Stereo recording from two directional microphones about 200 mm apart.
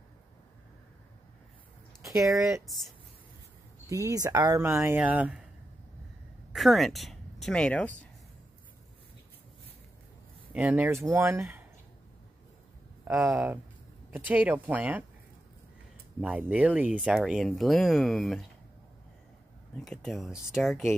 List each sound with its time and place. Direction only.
2.0 s speech: 15° right (ahead or behind)
3.9 s speech: 15° right (ahead or behind)
6.5 s speech: centre (ahead or behind)
10.5 s speech: 5° right (ahead or behind)
13.0 s speech: 10° right (ahead or behind)
16.2 s speech: 5° right (ahead or behind)
19.8 s speech: centre (ahead or behind)